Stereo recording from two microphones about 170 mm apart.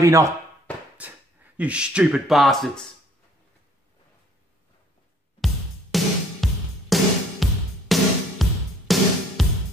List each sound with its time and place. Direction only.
0.0 s speech: 20° right (ahead or behind)
0.9 s speech: 10° right (ahead or behind)
5.4 s music: centre (ahead or behind)